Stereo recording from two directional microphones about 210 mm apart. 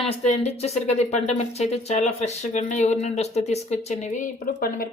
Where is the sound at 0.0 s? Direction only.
30° left (ahead or behind).